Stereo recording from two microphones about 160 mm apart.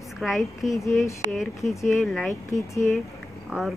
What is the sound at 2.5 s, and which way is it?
Speech, 20° left (ahead or behind).